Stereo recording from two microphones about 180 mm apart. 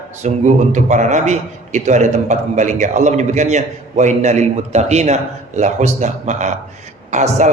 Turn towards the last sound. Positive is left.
turn(degrees=-40)  # may be behind; listen again after turning